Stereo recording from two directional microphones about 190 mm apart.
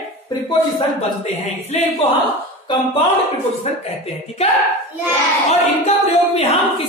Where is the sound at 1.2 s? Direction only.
35° left (ahead or behind).